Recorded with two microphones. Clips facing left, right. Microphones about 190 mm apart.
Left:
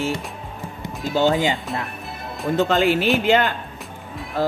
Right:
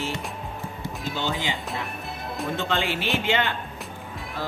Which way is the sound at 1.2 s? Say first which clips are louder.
Left 11 dB; 45° left (ahead or behind).